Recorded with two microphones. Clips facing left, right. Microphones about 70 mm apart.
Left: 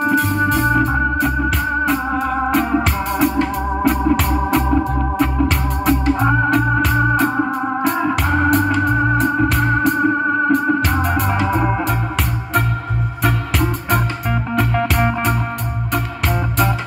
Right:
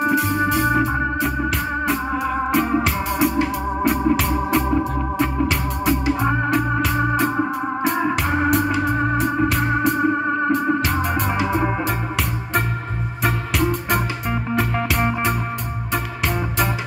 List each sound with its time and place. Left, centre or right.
0.0 s organ: centre
7.2 s organ: centre
7.8 s organ: centre
13.2 s music: centre